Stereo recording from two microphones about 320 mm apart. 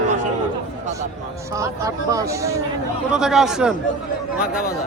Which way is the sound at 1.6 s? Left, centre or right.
Centre.